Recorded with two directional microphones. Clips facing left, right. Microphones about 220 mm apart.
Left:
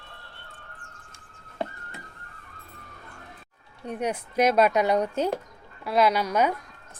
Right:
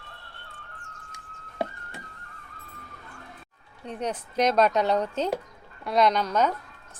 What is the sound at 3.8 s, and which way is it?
Speech, 10° left (ahead or behind).